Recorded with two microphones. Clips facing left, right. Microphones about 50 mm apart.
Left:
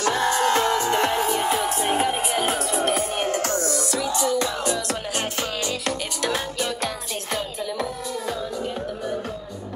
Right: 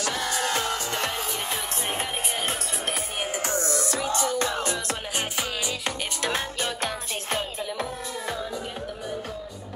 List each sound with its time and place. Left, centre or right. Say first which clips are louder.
0.0 s music: left 7 dB; left
1.6 s music: left 8 dB; centre
3.3 s music: left 5 dB; centre
3.5 s music: left 2 dB; right
5.4 s music: left 3 dB; centre
6.2 s music: left 3 dB; right